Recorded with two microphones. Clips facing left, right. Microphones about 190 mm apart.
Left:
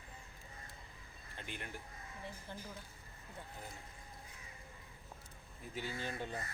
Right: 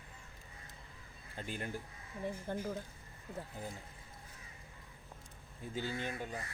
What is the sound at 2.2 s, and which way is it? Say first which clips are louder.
Speech: right 11 dB; 50° right (ahead or behind).